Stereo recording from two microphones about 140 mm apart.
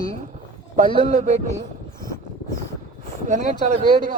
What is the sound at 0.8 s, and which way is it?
Speech, 60° right (ahead or behind).